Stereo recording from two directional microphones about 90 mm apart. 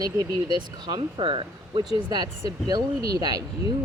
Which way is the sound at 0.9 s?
75° right (ahead or behind).